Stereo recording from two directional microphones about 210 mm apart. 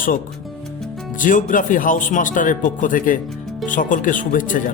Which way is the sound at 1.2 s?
40° left (ahead or behind).